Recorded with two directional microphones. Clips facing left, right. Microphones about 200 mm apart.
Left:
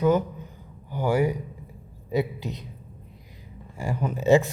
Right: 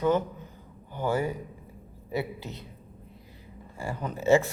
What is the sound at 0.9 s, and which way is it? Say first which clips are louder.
A man's voice: left 5 dB; 10° left (ahead or behind).